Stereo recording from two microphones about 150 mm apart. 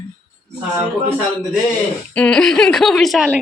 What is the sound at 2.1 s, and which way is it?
Speech, 5° left (ahead or behind).